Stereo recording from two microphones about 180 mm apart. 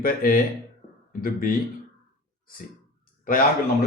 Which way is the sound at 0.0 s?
55° left (ahead or behind).